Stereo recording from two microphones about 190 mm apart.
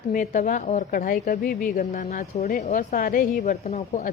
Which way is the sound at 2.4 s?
50° left (ahead or behind).